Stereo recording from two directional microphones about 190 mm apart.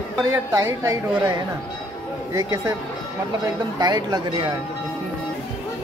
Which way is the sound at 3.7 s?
20° right (ahead or behind).